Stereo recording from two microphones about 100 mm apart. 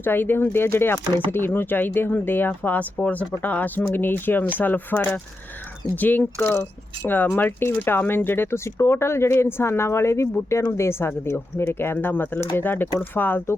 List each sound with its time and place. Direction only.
0.0 s speech: 20° left (ahead or behind)